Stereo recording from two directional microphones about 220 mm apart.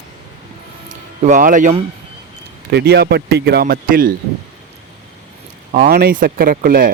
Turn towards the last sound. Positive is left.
turn(degrees=-40)  # may be behind; listen again after turning